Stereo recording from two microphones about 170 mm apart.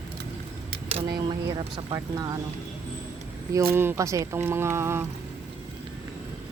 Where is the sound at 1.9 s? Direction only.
20° right (ahead or behind).